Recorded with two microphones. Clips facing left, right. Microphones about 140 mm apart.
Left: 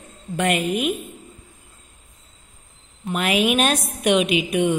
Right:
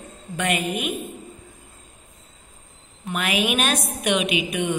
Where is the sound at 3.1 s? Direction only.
35° left (ahead or behind).